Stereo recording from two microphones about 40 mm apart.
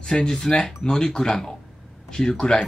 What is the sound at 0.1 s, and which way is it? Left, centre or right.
Speech, centre.